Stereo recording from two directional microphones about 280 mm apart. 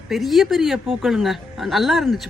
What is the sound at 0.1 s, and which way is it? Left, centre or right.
Speech, centre.